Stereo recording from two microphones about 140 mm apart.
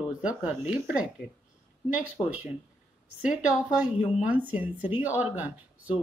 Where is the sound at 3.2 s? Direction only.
5° right (ahead or behind).